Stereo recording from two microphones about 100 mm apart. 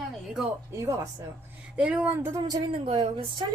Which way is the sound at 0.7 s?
30° right (ahead or behind).